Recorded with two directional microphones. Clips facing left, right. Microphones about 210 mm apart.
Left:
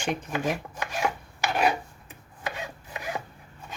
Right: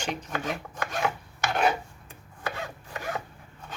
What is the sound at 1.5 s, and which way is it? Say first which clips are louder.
Filing: even; 5° left (ahead or behind).